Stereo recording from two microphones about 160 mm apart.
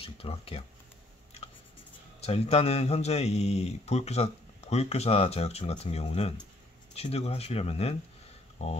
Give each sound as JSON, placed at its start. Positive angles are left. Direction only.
{"t": 0.0, "sound": "speech", "side_deg": 35}
{"t": 2.1, "sound": "speech", "side_deg": 40}